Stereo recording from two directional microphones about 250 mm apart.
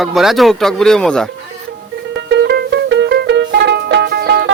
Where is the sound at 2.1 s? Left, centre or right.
Right.